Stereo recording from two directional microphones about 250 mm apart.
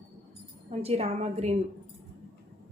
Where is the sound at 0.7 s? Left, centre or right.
Right.